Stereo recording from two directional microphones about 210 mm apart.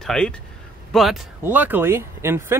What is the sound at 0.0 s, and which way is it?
Speech, 5° left (ahead or behind).